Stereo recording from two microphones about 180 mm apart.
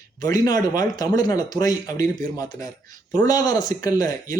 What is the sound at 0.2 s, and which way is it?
Speech, 20° left (ahead or behind).